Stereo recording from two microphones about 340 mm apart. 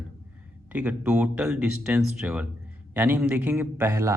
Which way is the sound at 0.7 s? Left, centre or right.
Centre.